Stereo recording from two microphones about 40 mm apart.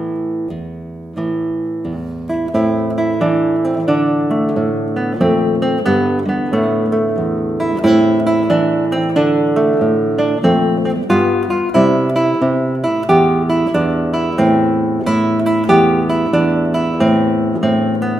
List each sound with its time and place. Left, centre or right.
2.5 s music: centre
5.2 s guitar: centre
6.5 s music: centre
13.1 s guitar: centre
14.4 s music: centre
17.2 s guitar: centre